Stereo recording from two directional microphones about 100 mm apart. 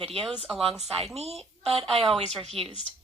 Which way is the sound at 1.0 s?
90° right.